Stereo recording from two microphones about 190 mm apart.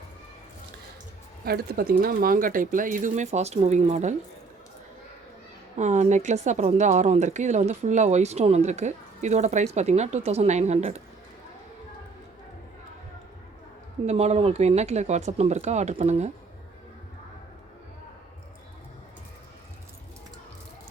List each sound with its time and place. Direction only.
1.5 s speech: 55° right (ahead or behind); by 4.1 s 40° right (ahead or behind)
5.7 s speech: 40° right (ahead or behind)
14.1 s speech: 35° right (ahead or behind)